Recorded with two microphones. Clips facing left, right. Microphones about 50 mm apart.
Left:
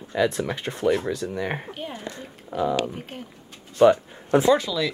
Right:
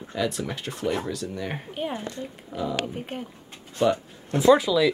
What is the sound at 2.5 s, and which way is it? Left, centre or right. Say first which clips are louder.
Speech: left 6 dB; centre.